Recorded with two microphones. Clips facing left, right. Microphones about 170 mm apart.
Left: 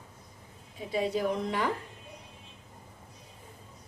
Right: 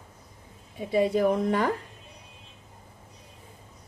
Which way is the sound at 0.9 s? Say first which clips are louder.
Right 6 dB; 55° right (ahead or behind).